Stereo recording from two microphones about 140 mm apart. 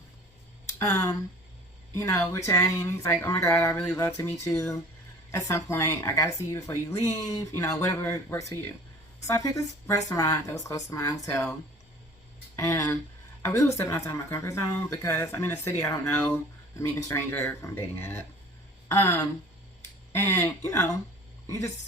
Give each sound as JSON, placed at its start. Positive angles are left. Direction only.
{"t": 0.8, "sound": "speech", "side_deg": 20}
{"t": 12.5, "sound": "a woman's voice", "side_deg": 20}